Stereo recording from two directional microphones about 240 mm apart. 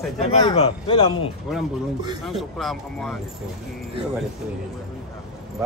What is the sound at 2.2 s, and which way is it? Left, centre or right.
Speech, centre.